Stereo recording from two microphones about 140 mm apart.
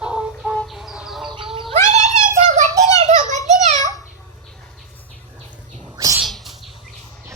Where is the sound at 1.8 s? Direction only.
60° right (ahead or behind).